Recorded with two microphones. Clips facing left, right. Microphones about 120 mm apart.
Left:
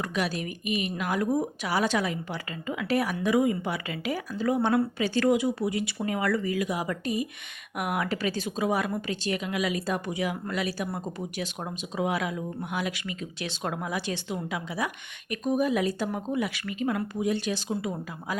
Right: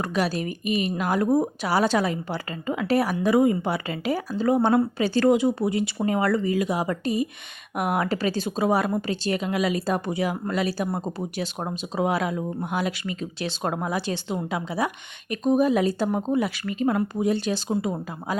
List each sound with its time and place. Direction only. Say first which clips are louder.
0.0 s speech: right 4 dB; 35° right (ahead or behind)